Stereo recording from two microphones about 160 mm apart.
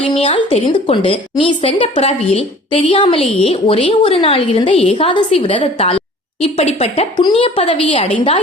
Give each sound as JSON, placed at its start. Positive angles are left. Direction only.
{"t": 0.2, "sound": "a woman's voice", "side_deg": 35}